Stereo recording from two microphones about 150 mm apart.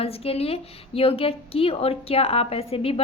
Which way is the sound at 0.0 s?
40° left (ahead or behind).